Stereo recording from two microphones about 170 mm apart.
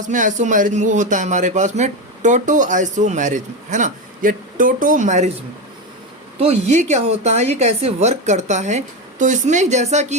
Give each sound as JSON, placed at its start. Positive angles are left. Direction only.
{"t": 0.0, "sound": "speech", "side_deg": -50}
{"t": 6.4, "sound": "speech", "side_deg": -40}